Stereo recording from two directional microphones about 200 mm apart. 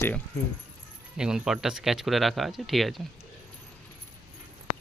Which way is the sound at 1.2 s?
5° right (ahead or behind).